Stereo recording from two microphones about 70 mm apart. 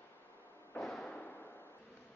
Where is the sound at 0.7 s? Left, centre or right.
Left.